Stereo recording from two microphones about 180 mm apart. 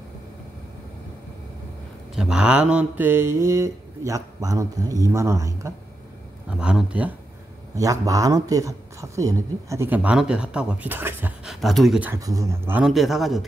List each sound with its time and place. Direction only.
2.1 s a man's voice: 5° right (ahead or behind)
6.6 s speech: 5° right (ahead or behind)
7.7 s a man's voice: 20° right (ahead or behind)
11.6 s speech: centre (ahead or behind)
12.1 s speech: 20° right (ahead or behind); by 13.5 s centre (ahead or behind)